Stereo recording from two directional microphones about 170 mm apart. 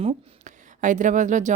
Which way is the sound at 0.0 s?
35° right (ahead or behind).